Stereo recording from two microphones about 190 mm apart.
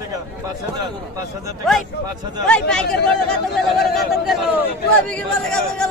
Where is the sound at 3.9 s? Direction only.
Centre (ahead or behind).